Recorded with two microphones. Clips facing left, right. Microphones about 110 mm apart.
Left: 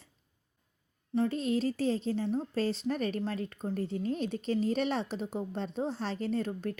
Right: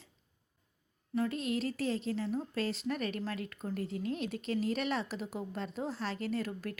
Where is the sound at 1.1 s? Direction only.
30° left (ahead or behind).